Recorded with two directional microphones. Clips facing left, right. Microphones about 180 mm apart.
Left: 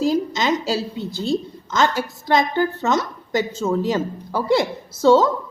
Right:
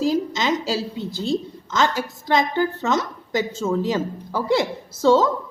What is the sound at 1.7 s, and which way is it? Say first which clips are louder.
A woman's voice: left 2 dB; 55° left (ahead or behind).